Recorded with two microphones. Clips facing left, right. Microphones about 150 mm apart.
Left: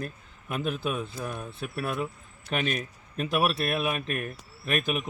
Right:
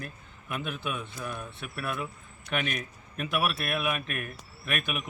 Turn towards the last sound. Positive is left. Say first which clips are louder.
# left 5 dB
turn(degrees=35)  # may be behind; listen again after turning